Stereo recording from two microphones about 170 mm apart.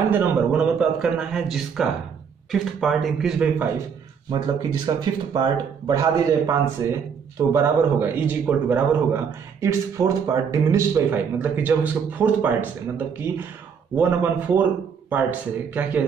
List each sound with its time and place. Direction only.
0.1 s a man's voice: 10° right (ahead or behind)
4.3 s a man's voice: 25° right (ahead or behind); by 15.2 s 10° right (ahead or behind)